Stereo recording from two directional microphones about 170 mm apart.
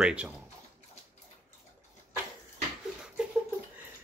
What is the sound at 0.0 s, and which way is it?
Speech, 5° right (ahead or behind).